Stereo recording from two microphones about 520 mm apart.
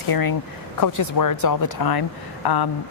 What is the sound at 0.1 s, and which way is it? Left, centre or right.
A woman's voice, left.